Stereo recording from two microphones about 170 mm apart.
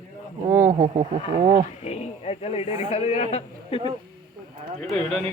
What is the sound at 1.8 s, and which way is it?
A man's voice, 40° left (ahead or behind).